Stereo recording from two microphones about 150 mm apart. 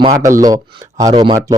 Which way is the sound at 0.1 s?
20° right (ahead or behind).